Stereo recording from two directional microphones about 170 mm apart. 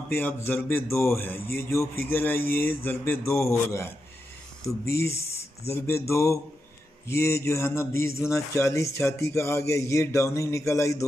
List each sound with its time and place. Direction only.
0.1 s a man's voice: 10° left (ahead or behind)